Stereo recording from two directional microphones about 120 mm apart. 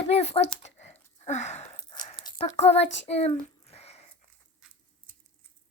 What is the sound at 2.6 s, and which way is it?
A child's voice, 60° left (ahead or behind).